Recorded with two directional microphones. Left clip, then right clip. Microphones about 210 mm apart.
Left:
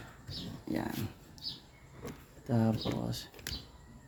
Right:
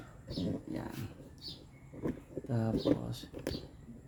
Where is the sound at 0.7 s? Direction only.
15° left (ahead or behind).